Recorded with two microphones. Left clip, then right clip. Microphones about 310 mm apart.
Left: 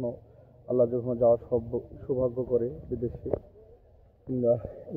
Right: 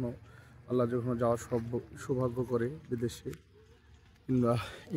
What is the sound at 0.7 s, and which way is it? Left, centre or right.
Speech, right.